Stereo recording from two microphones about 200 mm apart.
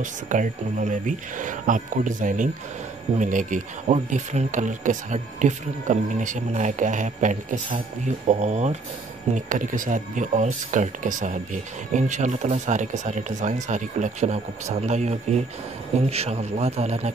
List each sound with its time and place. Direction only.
0.0 s speech: 40° right (ahead or behind)